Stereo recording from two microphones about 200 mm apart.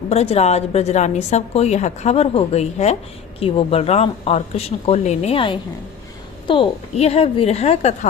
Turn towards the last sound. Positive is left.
turn(degrees=30)  # may be behind; listen again after turning